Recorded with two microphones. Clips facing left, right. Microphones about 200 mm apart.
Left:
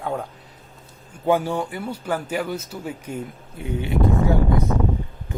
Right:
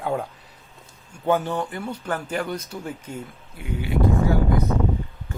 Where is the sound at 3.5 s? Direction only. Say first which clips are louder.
Left 2 dB; 25° left (ahead or behind).